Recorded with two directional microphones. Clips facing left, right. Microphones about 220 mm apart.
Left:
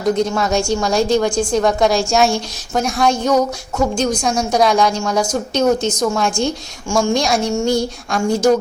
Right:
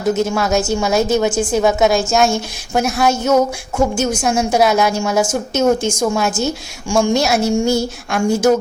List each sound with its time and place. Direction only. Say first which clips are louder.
0.0 s a woman's voice: even; 5° right (ahead or behind)